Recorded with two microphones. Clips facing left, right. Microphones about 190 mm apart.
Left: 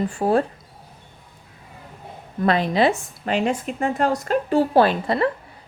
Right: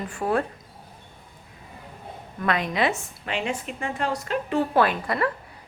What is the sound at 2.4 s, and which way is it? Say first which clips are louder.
A woman's voice: left 6 dB; 30° left (ahead or behind).